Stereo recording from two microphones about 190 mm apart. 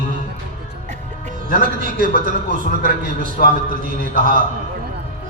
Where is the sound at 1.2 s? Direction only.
45° right (ahead or behind).